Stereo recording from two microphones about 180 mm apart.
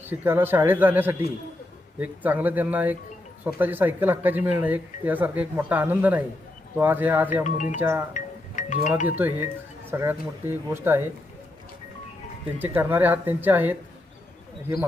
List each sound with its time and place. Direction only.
0.0 s speech: 10° right (ahead or behind)
7.4 s speech: 40° left (ahead or behind)
7.8 s speech: 10° right (ahead or behind)
8.1 s music: 45° left (ahead or behind)
9.0 s speech: 10° right (ahead or behind)
12.5 s speech: 10° right (ahead or behind)